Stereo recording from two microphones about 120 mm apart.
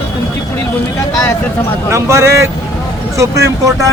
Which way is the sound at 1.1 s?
25° left (ahead or behind).